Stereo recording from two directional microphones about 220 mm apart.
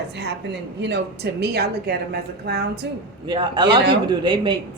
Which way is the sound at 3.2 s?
20° right (ahead or behind).